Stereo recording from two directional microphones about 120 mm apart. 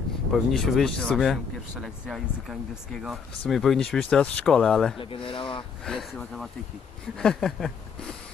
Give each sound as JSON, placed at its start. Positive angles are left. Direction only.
{"t": 0.5, "sound": "speech", "side_deg": 0}
{"t": 4.9, "sound": "speech", "side_deg": 45}
{"t": 5.9, "sound": "speech", "side_deg": 5}